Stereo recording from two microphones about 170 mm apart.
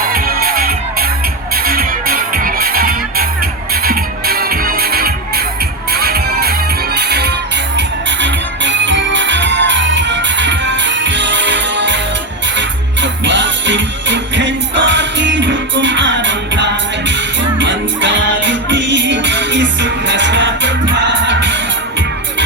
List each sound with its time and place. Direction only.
0.0 s music: 60° right (ahead or behind); by 7.3 s 75° right (ahead or behind)
7.8 s music: 90° right